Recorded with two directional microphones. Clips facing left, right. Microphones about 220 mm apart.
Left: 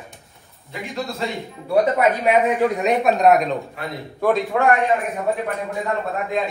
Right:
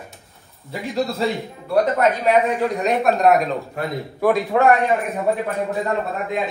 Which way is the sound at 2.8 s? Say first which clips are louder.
Right 1 dB; centre (ahead or behind).